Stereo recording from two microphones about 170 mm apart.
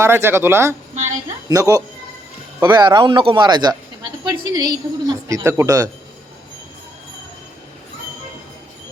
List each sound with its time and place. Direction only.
0.0 s speech: 15° right (ahead or behind)